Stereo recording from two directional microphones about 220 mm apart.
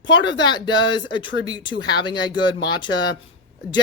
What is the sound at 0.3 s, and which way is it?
Speech, 20° left (ahead or behind).